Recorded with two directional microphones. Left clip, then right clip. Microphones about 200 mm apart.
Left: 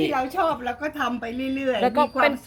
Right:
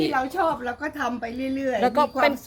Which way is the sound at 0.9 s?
30° left (ahead or behind).